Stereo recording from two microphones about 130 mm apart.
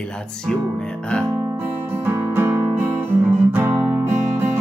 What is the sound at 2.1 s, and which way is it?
Music, 15° right (ahead or behind).